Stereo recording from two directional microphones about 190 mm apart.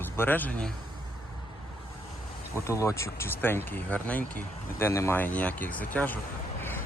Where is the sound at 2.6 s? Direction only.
15° left (ahead or behind).